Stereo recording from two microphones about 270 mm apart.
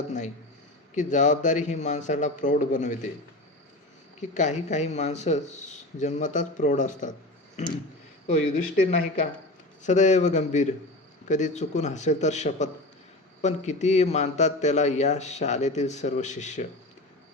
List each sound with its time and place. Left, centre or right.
0.9 s a man's voice: left
4.2 s a man's voice: left
8.3 s a man's voice: left